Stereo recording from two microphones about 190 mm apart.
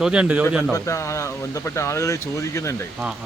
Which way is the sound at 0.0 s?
5° right (ahead or behind).